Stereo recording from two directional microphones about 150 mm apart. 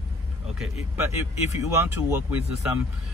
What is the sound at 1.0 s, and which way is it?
Speech, 15° right (ahead or behind).